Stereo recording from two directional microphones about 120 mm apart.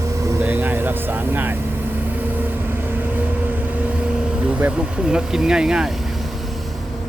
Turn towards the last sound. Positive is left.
turn(degrees=-5)  # may be behind; listen again after turning